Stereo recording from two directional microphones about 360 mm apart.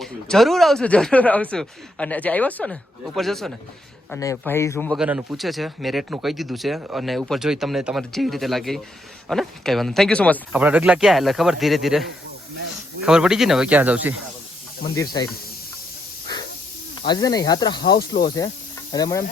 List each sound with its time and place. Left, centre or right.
0.0 s a man's voice: centre
14.9 s speech: centre
17.1 s speech: centre
17.9 s speech: left
18.9 s speech: centre